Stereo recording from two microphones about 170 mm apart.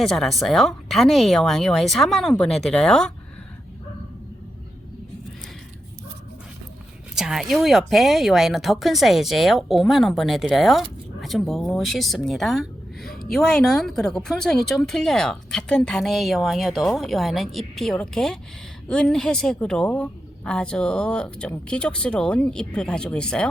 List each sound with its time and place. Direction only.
0.0 s speech: centre (ahead or behind)
7.2 s speech: 5° right (ahead or behind)
13.1 s a sound: 60° left (ahead or behind)
13.3 s speech: 5° left (ahead or behind)